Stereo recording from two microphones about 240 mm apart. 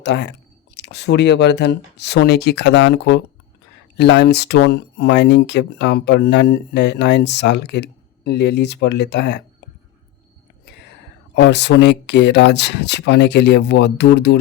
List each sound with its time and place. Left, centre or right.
0.0 s speech: left
11.3 s speech: left